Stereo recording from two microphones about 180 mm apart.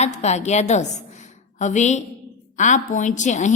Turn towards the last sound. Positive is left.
turn(degrees=40)  # may be behind; listen again after turning